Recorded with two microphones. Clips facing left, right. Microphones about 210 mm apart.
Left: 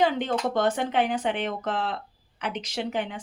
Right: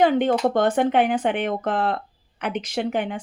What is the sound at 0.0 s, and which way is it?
Speech, 55° right (ahead or behind).